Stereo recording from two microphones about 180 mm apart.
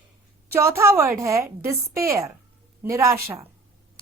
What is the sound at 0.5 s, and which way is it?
A woman's voice, 15° right (ahead or behind).